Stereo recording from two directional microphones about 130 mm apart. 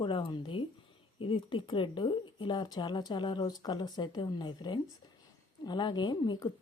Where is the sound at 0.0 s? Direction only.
40° left (ahead or behind).